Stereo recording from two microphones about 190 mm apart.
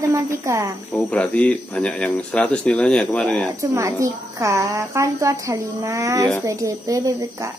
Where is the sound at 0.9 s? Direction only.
5° left (ahead or behind).